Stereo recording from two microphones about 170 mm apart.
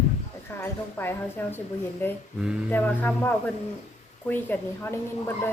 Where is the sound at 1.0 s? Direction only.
15° left (ahead or behind).